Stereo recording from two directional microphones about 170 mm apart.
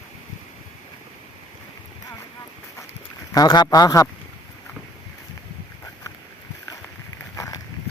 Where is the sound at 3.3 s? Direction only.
25° left (ahead or behind).